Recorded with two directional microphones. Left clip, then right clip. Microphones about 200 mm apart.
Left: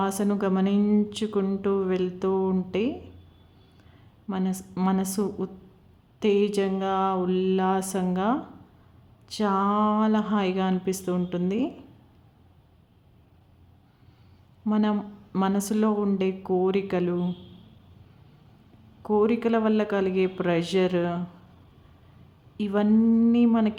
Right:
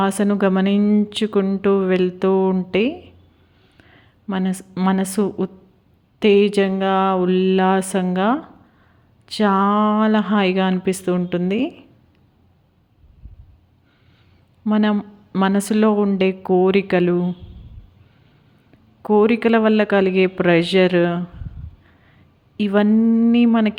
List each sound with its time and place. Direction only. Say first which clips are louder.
0.0 s speech: right 8 dB; 25° right (ahead or behind)
0.8 s speech: right 6 dB; 10° right (ahead or behind)
1.1 s speech: right 8 dB; 25° right (ahead or behind)
3.8 s a sound: right 7 dB; 25° right (ahead or behind)
4.9 s speech: right 7 dB; 25° right (ahead or behind)
14.7 s speech: right 7 dB; 25° right (ahead or behind)
19.0 s speech: right 8 dB; 25° right (ahead or behind)
22.5 s speech: right 8 dB; 25° right (ahead or behind)
22.9 s speech: right 5 dB; 15° right (ahead or behind)